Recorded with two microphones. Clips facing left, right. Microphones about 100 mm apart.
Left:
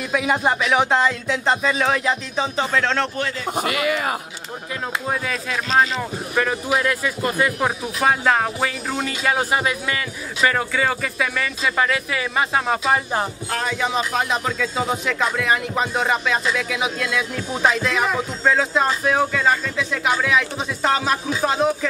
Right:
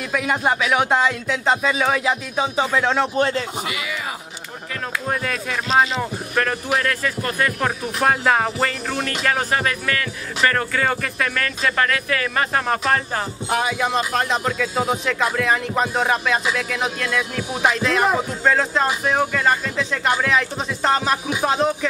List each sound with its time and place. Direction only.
0.1 s speech: centre (ahead or behind)
3.5 s a man's voice: 55° left (ahead or behind)
5.0 s speech: centre (ahead or behind)
13.5 s speech: 10° right (ahead or behind)
17.4 s speech: 10° right (ahead or behind)
17.7 s speech: centre (ahead or behind)